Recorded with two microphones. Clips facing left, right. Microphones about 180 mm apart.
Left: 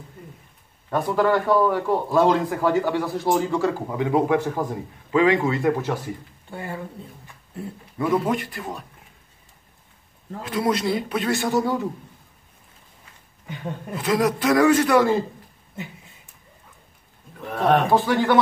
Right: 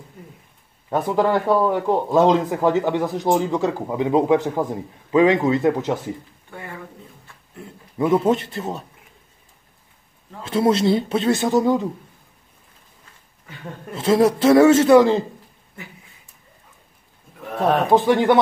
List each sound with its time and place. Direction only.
0.8 s speech: 20° right (ahead or behind)
6.5 s speech: 30° left (ahead or behind)
8.0 s speech: 25° right (ahead or behind)
10.4 s speech: 25° right (ahead or behind)
13.9 s speech: 25° right (ahead or behind)
17.8 s speech: 20° right (ahead or behind)